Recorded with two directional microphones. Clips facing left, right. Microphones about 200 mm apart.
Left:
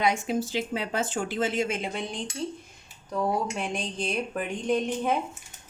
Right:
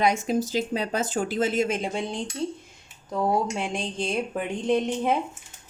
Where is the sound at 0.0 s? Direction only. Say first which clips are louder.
Right 3 dB; 40° right (ahead or behind).